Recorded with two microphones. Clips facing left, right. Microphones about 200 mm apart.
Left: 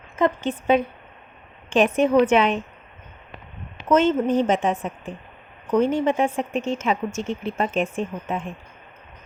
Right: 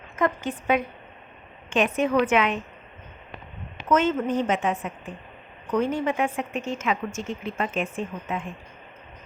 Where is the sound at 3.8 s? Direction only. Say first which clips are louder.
Left 4 dB; 30° left (ahead or behind).